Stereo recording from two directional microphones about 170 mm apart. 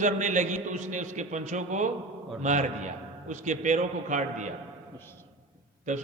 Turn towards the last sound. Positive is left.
turn(degrees=-45)  # may be behind; listen again after turning